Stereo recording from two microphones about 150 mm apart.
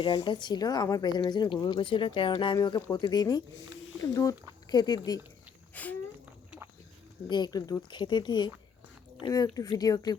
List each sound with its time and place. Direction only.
0.0 s a woman's voice: 30° left (ahead or behind)
5.7 s speech: 10° left (ahead or behind)
7.3 s a woman's voice: 30° left (ahead or behind)